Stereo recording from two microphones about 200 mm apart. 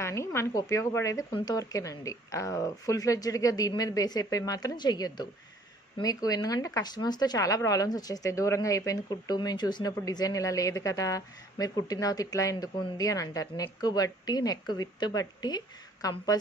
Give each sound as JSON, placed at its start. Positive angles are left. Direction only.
{"t": 0.0, "sound": "speech", "side_deg": 15}